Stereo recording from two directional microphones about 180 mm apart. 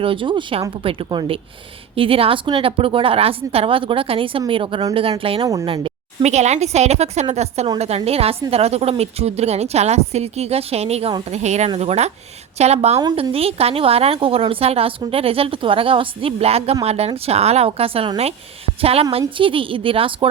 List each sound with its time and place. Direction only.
0.0 s a woman's voice: 30° right (ahead or behind)
13.0 s a woman's voice: 20° right (ahead or behind)